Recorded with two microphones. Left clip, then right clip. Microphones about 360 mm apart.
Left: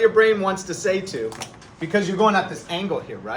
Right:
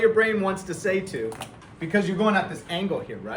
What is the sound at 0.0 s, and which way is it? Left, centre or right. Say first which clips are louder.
A man's voice: left 4 dB; centre.